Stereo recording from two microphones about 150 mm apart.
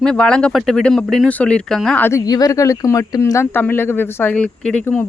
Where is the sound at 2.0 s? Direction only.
20° left (ahead or behind).